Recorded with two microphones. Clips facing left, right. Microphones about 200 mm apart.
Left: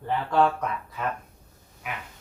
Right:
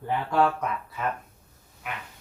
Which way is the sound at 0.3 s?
5° right (ahead or behind).